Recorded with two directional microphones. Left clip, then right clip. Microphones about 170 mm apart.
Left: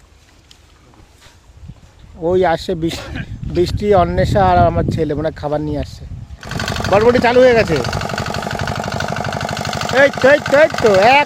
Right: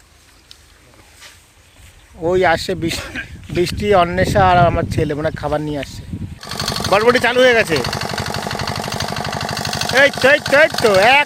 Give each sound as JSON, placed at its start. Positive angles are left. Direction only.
{"t": 2.1, "sound": "speech", "side_deg": 10}
{"t": 2.9, "sound": "speech", "side_deg": 25}
{"t": 3.5, "sound": "speech", "side_deg": 10}
{"t": 6.5, "sound": "engine", "side_deg": 5}
{"t": 8.3, "sound": "a sound", "side_deg": 5}
{"t": 10.2, "sound": "speech", "side_deg": 20}
{"t": 10.5, "sound": "speech", "side_deg": 5}